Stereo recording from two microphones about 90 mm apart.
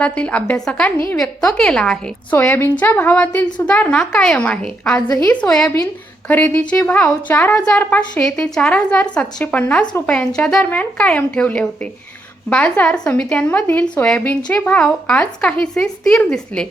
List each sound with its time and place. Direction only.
0.0 s a woman's voice: 15° left (ahead or behind)
2.3 s a woman's voice: 20° left (ahead or behind)
5.0 s a woman's voice: 40° left (ahead or behind)
5.3 s a woman's voice: 10° left (ahead or behind)
6.2 s a woman's voice: 20° left (ahead or behind)